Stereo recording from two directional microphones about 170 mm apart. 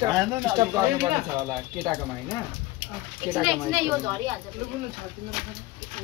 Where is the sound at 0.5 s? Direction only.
20° right (ahead or behind).